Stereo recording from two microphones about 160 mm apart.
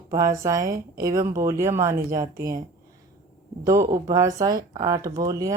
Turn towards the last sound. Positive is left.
turn(degrees=-20)  # may be behind; listen again after turning